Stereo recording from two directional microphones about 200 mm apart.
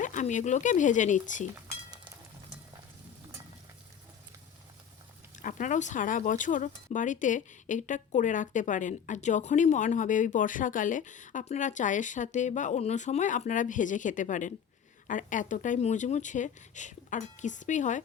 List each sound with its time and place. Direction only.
0.0 s speech: 40° left (ahead or behind)
5.4 s speech: 40° left (ahead or behind)